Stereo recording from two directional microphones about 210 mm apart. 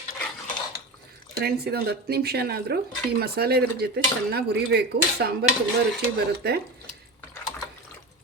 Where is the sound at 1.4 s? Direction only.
50° right (ahead or behind).